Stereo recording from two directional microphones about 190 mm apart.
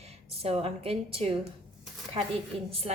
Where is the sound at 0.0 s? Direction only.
30° right (ahead or behind).